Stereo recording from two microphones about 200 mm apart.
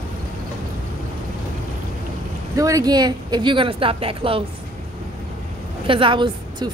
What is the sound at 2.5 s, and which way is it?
Speech, 15° right (ahead or behind).